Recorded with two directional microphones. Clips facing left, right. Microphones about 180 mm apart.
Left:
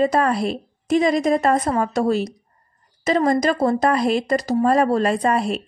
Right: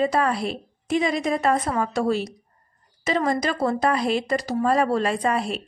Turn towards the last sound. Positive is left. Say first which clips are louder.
# left 4 dB
turn(degrees=40)  # may be behind; listen again after turning